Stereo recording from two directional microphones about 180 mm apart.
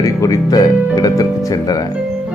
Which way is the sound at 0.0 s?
20° left (ahead or behind).